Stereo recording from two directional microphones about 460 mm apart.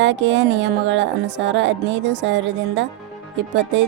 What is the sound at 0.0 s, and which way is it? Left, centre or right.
A woman's voice, right.